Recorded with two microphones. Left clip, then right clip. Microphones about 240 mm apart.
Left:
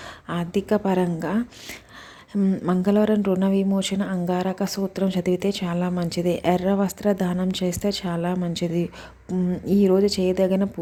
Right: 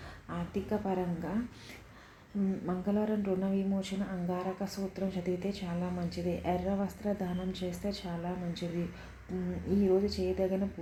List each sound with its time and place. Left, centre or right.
0.3 s a woman's voice: left
9.6 s speech: left